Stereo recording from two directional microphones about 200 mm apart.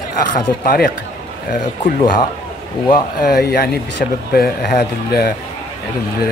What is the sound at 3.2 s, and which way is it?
Speech, 50° left (ahead or behind).